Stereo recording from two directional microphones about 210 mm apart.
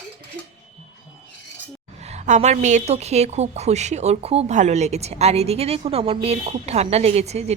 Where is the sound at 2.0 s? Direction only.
30° right (ahead or behind).